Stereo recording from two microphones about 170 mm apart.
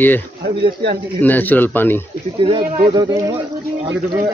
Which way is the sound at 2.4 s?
30° right (ahead or behind).